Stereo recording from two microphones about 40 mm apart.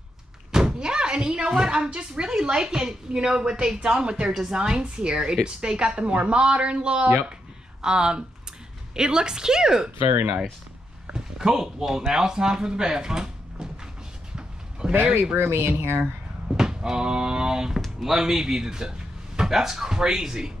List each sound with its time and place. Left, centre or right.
0.5 s thunk: centre
1.7 s a woman's voice: right
11.1 s speech: centre
14.3 s a sound: right
15.3 s speech: right
16.5 s speech: centre